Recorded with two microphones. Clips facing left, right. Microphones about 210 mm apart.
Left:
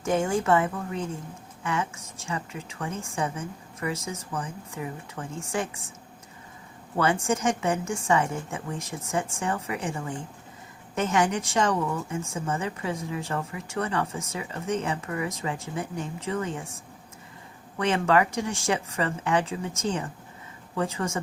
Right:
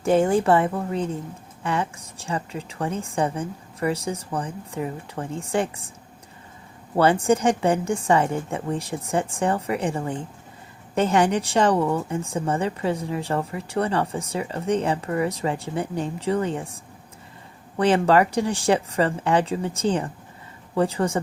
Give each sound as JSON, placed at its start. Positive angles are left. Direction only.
{"t": 0.0, "sound": "a woman's voice", "side_deg": -35}
{"t": 6.9, "sound": "a woman's voice", "side_deg": -35}
{"t": 17.7, "sound": "a woman's voice", "side_deg": -35}